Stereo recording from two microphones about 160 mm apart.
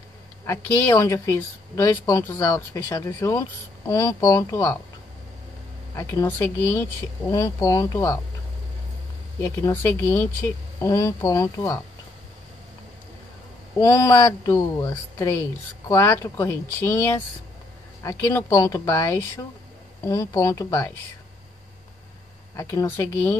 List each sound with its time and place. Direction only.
0.5 s a woman's voice: 20° left (ahead or behind)
5.9 s a woman's voice: 20° left (ahead or behind)
9.4 s a woman's voice: 20° left (ahead or behind)
13.7 s a woman's voice: 20° left (ahead or behind)
22.6 s speech: 20° left (ahead or behind)